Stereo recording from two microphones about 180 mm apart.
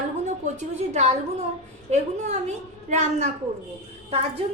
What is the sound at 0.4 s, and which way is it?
A woman's voice, 40° right (ahead or behind).